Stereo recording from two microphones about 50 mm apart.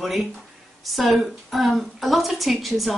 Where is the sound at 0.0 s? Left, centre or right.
Centre.